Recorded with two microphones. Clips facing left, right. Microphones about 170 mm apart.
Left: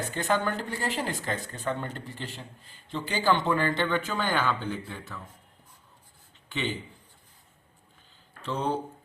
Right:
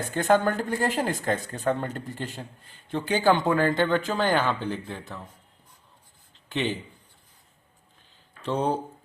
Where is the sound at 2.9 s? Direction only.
55° right (ahead or behind); by 4.4 s 40° right (ahead or behind).